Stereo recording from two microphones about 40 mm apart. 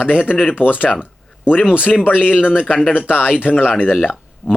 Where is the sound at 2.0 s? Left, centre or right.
Left.